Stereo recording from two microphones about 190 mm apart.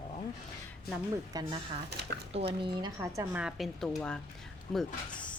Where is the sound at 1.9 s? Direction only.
60° right (ahead or behind).